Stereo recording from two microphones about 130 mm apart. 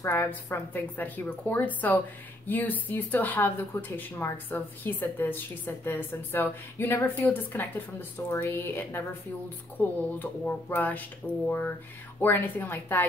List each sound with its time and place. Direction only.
0.0 s a woman's voice: 15° left (ahead or behind)